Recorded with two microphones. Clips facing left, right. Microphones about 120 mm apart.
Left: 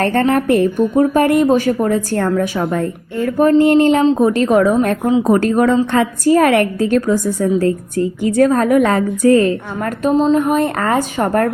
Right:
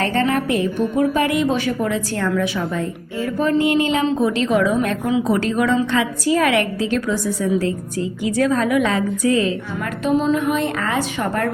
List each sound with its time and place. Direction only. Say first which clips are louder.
0.0 s a woman's voice: left 5 dB; 55° left (ahead or behind)